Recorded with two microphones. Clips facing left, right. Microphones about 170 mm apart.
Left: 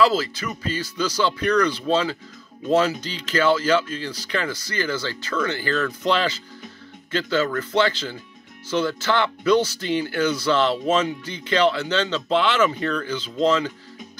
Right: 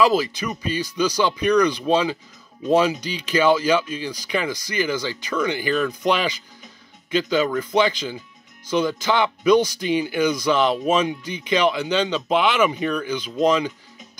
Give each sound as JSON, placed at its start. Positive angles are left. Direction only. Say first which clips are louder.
{"t": 0.0, "sound": "speech", "louder": "right 1 dB", "side_deg": -15}